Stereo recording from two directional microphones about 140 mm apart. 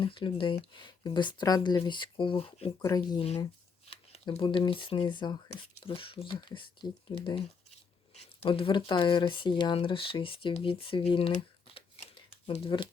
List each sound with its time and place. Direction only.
0.0 s speech: 40° left (ahead or behind)
2.8 s speech: 25° left (ahead or behind)
3.2 s speech: 45° left (ahead or behind)
4.3 s speech: 35° left (ahead or behind)
8.1 s speech: 50° left (ahead or behind)